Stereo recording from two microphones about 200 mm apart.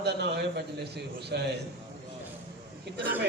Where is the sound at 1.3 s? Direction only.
55° right (ahead or behind).